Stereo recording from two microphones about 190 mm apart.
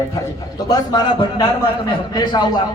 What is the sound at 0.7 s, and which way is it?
Speech, 20° left (ahead or behind).